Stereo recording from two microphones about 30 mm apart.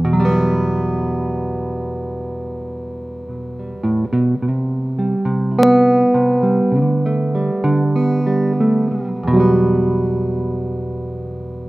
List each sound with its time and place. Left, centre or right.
0.0 s music: centre
3.8 s music: centre
7.6 s music: centre